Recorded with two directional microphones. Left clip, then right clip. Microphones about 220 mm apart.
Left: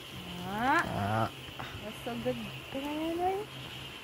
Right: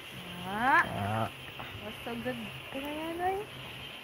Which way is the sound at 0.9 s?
10° left (ahead or behind).